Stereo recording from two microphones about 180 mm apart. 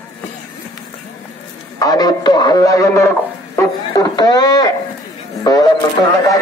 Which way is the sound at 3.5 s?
20° left (ahead or behind).